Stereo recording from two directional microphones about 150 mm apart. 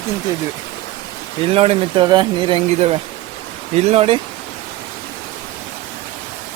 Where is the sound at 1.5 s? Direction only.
40° right (ahead or behind).